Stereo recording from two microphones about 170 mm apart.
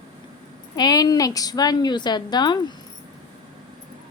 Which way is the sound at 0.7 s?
25° left (ahead or behind).